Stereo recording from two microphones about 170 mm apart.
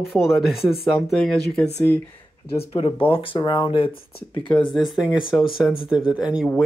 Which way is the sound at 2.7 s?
35° left (ahead or behind).